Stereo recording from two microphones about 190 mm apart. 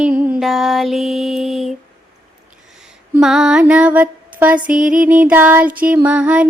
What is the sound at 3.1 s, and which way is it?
Speech, 5° right (ahead or behind).